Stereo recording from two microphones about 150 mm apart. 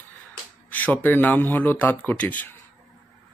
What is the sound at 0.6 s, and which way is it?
Speech, 10° left (ahead or behind).